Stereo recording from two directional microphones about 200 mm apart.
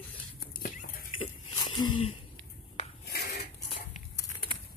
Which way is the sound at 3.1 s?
55° left (ahead or behind).